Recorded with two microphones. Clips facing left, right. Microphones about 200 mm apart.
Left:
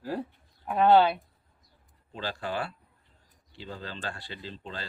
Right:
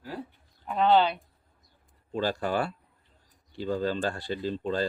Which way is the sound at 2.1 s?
45° right (ahead or behind).